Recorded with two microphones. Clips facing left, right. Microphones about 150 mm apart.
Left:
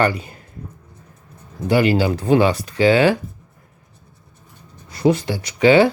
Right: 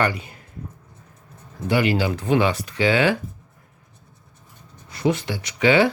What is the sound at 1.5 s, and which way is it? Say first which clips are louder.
Speech: left 4 dB; 35° left (ahead or behind).